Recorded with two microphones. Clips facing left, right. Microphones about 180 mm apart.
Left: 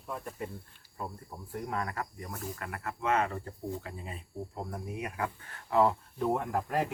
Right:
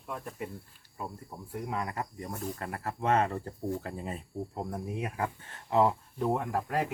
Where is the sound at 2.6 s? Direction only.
35° right (ahead or behind).